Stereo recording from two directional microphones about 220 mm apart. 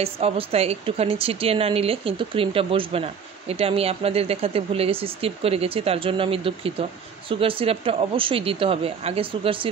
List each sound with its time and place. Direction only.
0.0 s a woman's voice: 25° right (ahead or behind)